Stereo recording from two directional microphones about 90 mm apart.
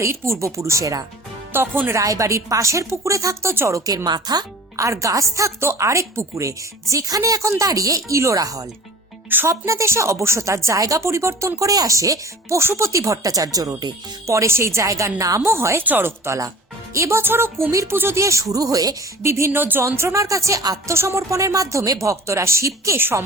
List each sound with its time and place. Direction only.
0.0 s speech: 30° right (ahead or behind)
1.5 s a woman's voice: 25° right (ahead or behind)
2.0 s speech: 35° right (ahead or behind)
4.8 s speech: 35° right (ahead or behind)
14.3 s a woman's voice: 30° right (ahead or behind)
19.2 s a woman's voice: 30° right (ahead or behind)